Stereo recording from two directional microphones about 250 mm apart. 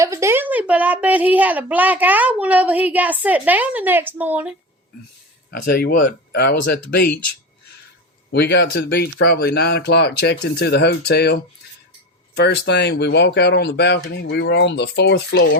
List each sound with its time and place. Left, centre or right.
0.0 s a woman's voice: centre
5.5 s speech: left
8.3 s speech: left